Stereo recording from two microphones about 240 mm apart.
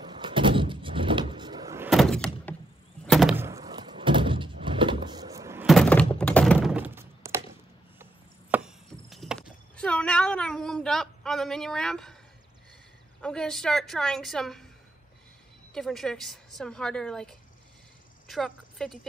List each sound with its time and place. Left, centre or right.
0.0 s vehicle: centre
1.9 s door: centre
6.1 s thunk: centre
8.0 s chop: centre
13.2 s a woman's voice: centre
15.7 s a woman's voice: centre
18.2 s a sound: centre